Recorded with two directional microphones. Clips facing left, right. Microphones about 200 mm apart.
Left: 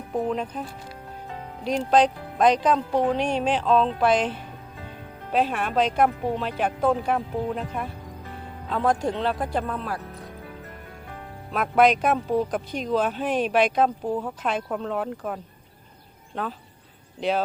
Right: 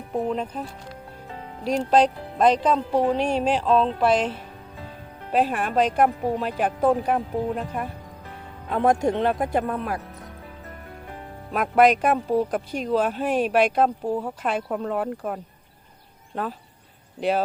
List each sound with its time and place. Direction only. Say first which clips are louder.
0.2 s speech: even; centre (ahead or behind)
1.9 s speech: even; 5° right (ahead or behind)
5.3 s speech: right 1 dB; 5° right (ahead or behind)
8.7 s speech: right 3 dB; 20° right (ahead or behind)
11.5 s speech: right 1 dB; 5° right (ahead or behind)